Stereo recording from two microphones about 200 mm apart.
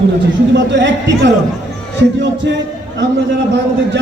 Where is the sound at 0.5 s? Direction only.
65° right (ahead or behind).